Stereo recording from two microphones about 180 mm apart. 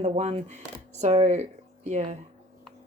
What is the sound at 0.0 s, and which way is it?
Speech, 35° right (ahead or behind).